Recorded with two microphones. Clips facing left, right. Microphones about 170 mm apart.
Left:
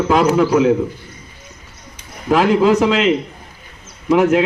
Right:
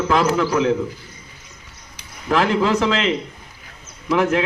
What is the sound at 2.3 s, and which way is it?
Speech, 15° left (ahead or behind).